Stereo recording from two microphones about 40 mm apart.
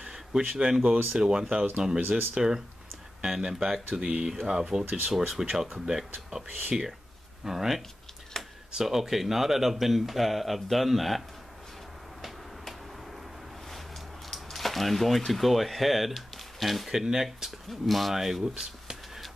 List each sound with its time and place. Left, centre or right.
0.0 s a sound: centre
1.1 s speech: centre
2.0 s speech: right
2.3 s speech: centre
8.3 s a sound: centre
8.7 s speech: centre
14.3 s speech: centre
16.9 s speech: centre
17.6 s speech: centre